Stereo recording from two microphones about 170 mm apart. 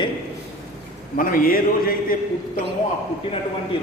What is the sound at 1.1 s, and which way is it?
A man's voice, 55° left (ahead or behind).